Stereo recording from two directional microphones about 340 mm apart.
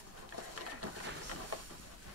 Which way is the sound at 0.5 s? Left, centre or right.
Right.